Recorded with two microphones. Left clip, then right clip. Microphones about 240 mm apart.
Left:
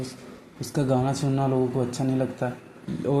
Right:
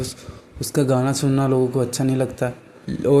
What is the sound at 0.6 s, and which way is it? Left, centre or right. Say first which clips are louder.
A man's voice: right 5 dB; right.